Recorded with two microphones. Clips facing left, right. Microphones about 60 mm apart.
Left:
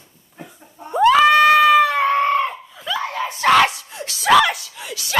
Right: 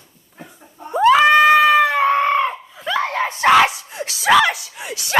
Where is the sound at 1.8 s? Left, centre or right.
Right.